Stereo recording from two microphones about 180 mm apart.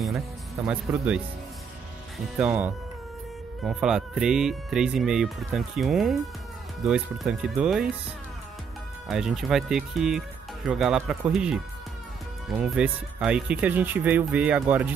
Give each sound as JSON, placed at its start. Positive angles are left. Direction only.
{"t": 0.7, "sound": "speech", "side_deg": -5}
{"t": 2.3, "sound": "speech", "side_deg": -5}
{"t": 9.0, "sound": "speech", "side_deg": 0}